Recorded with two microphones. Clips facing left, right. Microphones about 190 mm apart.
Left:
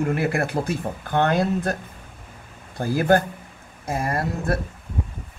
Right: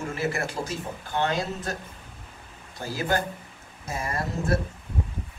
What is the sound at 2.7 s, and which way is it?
Speech, 55° left (ahead or behind).